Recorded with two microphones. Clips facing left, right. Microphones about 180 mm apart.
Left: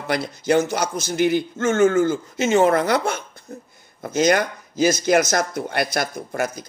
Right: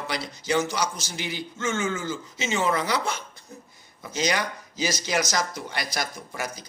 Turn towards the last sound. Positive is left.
turn(degrees=50)  # may be behind; listen again after turning